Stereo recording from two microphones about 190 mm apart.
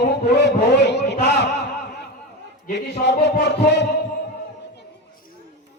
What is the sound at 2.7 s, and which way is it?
A man's voice, 65° left (ahead or behind).